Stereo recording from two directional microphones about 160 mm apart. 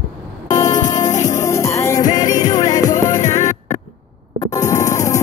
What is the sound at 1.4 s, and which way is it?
Music, 20° left (ahead or behind).